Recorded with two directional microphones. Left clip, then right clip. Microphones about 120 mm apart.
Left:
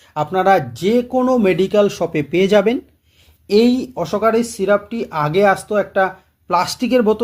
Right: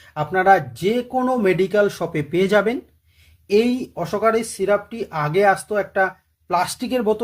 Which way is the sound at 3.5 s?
35° left (ahead or behind).